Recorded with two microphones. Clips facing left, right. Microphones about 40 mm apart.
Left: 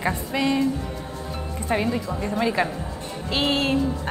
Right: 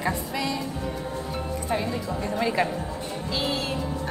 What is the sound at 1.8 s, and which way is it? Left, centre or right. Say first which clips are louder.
Speech: left 3 dB; centre.